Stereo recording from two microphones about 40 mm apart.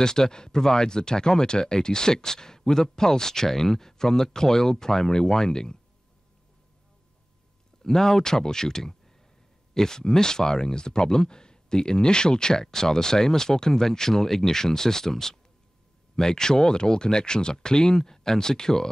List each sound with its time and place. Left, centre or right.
0.0 s speech: centre
7.8 s speech: centre